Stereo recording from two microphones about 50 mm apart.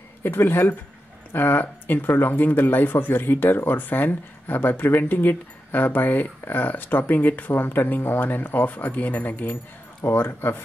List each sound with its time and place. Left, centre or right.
0.2 s speech: left
10.0 s speech: left